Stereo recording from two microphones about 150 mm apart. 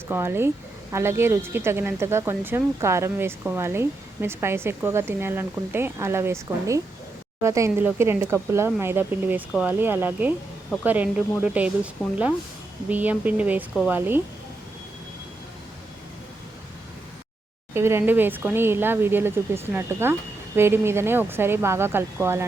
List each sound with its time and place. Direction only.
0.1 s speech: 15° right (ahead or behind)
17.7 s speech: 15° right (ahead or behind)